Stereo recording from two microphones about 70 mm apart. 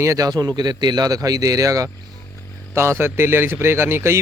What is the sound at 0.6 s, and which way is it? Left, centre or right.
A man's voice, right.